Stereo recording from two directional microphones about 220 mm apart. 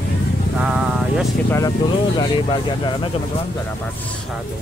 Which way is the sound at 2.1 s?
20° left (ahead or behind).